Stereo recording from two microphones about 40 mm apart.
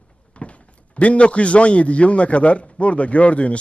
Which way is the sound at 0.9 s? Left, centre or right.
Left.